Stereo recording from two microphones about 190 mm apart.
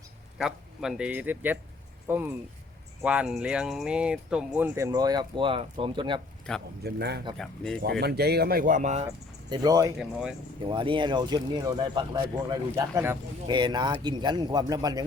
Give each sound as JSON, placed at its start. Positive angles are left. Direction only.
{"t": 0.3, "sound": "speech", "side_deg": 0}
{"t": 4.9, "sound": "speech", "side_deg": -20}
{"t": 6.5, "sound": "speech", "side_deg": 5}
{"t": 6.8, "sound": "speech", "side_deg": -60}
{"t": 7.3, "sound": "speech", "side_deg": 5}
{"t": 7.8, "sound": "speech", "side_deg": -55}
{"t": 9.0, "sound": "speech", "side_deg": -20}
{"t": 10.0, "sound": "speech", "side_deg": -5}
{"t": 10.6, "sound": "speech", "side_deg": -25}